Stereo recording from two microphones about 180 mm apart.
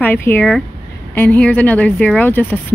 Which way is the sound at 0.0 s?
10° left (ahead or behind).